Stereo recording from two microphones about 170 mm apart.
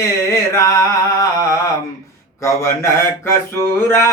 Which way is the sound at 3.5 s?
15° left (ahead or behind).